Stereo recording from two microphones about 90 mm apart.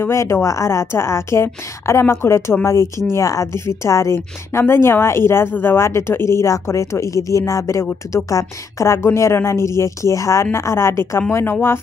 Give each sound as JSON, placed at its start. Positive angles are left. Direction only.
{"t": 0.0, "sound": "speech", "side_deg": 30}